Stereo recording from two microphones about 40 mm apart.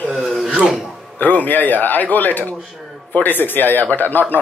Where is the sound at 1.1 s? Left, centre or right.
Left.